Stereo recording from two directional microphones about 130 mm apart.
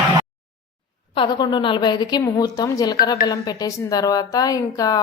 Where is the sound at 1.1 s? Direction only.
35° left (ahead or behind).